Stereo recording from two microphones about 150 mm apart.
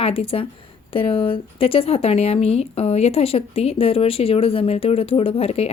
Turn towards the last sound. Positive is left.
turn(degrees=40)  # may be behind; listen again after turning